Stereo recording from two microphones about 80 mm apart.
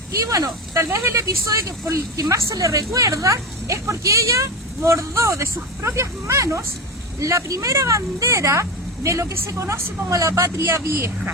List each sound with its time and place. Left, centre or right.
0.3 s speech: right